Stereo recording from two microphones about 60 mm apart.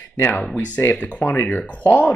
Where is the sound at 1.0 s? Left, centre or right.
Left.